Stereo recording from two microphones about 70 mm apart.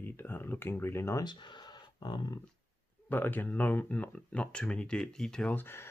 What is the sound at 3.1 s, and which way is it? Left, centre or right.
Speech, left.